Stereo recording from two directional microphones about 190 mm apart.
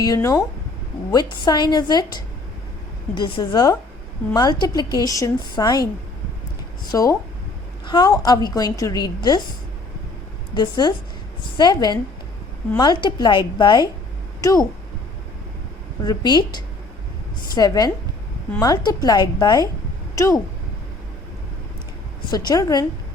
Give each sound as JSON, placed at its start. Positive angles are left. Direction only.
{"t": 0.0, "sound": "a woman's voice", "side_deg": 15}
{"t": 6.9, "sound": "a woman's voice", "side_deg": 20}
{"t": 10.5, "sound": "a woman's voice", "side_deg": 25}
{"t": 16.0, "sound": "a woman's voice", "side_deg": 20}
{"t": 22.3, "sound": "a woman's voice", "side_deg": 20}